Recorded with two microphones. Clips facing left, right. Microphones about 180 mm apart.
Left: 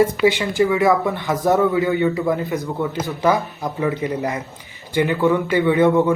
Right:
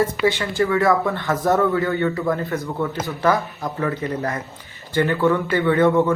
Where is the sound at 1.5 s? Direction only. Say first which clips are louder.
Left 2 dB; 5° left (ahead or behind).